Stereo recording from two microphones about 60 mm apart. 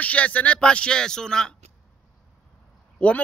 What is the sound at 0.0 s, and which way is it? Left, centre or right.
A man's voice, left.